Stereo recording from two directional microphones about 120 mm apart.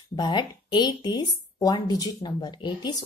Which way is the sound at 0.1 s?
40° left (ahead or behind).